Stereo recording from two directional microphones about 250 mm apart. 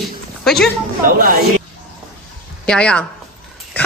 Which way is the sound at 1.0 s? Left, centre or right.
Right.